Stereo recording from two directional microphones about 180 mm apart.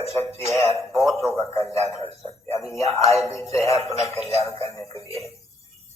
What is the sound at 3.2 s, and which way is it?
Speech, 15° left (ahead or behind).